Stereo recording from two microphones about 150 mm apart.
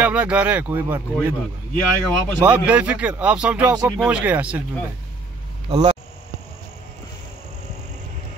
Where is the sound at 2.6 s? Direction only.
10° right (ahead or behind).